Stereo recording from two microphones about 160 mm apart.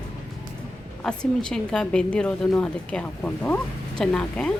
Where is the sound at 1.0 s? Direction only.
5° left (ahead or behind).